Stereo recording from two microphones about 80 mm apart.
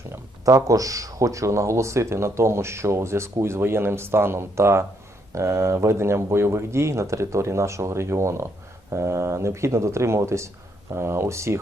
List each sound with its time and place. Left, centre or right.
0.1 s speech: right